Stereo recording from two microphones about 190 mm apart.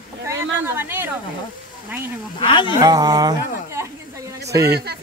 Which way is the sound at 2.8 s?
20° right (ahead or behind).